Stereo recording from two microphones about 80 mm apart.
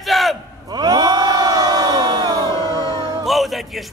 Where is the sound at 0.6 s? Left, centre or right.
Right.